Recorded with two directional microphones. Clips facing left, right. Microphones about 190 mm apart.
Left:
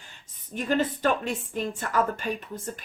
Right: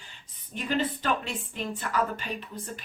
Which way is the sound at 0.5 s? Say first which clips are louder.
Left 3 dB; 45° left (ahead or behind).